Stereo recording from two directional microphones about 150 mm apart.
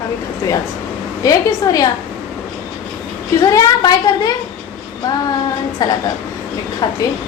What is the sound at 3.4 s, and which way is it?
Speech, 25° left (ahead or behind).